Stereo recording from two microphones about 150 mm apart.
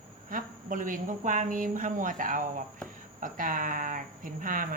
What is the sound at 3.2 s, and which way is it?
A woman's voice, 60° right (ahead or behind).